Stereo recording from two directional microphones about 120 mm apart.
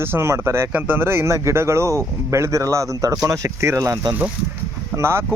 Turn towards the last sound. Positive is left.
turn(degrees=-20)  # may be behind; listen again after turning